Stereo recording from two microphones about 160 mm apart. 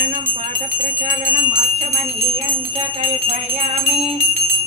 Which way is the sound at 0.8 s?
55° right (ahead or behind).